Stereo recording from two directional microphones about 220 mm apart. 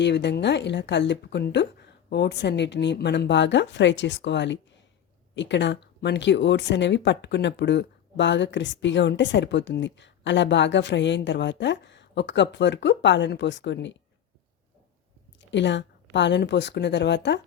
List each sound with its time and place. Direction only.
0.0 s speech: 50° left (ahead or behind)
15.4 s speech: 55° left (ahead or behind)